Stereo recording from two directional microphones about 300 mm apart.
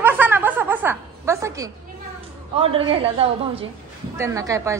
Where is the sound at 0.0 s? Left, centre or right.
Centre.